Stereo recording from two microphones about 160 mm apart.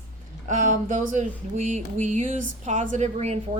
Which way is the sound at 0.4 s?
50° right (ahead or behind).